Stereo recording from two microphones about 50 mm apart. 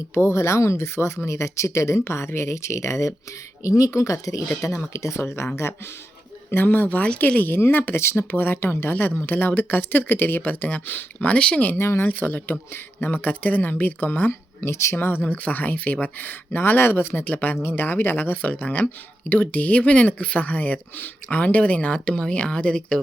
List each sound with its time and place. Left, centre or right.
0.1 s speech: left
4.6 s speech: left
4.9 s speech: left
6.5 s speech: left
11.8 s speech: left
12.0 s speech: left
14.3 s speech: left
14.9 s speech: left
15.2 s speech: left
17.2 s speech: left